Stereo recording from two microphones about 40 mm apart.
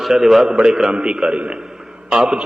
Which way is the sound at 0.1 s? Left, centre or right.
Centre.